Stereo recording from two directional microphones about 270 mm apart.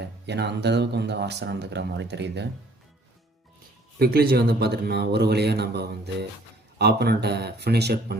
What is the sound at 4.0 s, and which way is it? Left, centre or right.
Speech, right.